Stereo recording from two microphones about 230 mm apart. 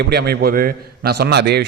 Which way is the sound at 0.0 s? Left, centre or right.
Right.